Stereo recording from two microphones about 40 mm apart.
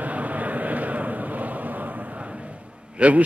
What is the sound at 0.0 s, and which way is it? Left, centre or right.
Vehicle, right.